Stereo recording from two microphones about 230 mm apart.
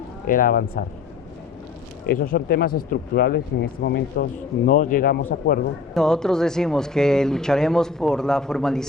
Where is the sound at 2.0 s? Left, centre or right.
Left.